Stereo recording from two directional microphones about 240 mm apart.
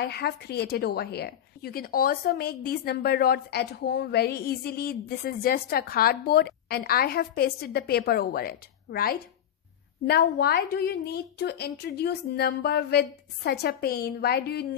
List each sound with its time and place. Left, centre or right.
0.0 s a woman's voice: left